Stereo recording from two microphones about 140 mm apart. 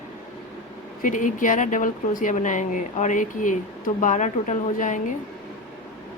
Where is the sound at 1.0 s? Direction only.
65° left (ahead or behind).